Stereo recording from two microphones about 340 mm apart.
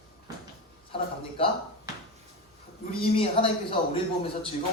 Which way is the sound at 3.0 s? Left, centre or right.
Centre.